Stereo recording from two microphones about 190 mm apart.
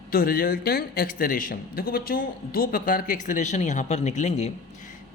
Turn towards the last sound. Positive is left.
turn(degrees=35)  # may be behind; listen again after turning